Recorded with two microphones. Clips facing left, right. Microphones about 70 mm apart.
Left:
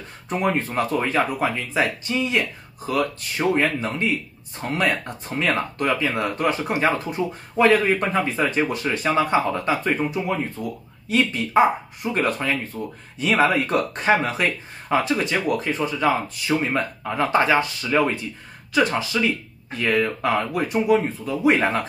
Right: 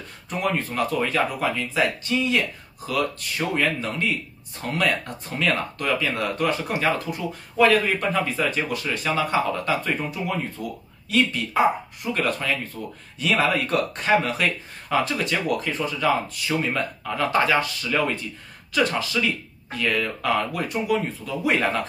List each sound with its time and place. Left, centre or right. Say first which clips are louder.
0.3 s speech: left 3 dB; left